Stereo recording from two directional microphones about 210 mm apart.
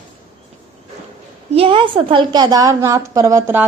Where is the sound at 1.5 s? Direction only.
25° right (ahead or behind).